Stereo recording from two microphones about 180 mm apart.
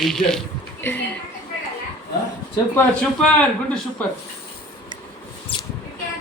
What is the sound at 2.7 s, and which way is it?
Speech, 5° left (ahead or behind).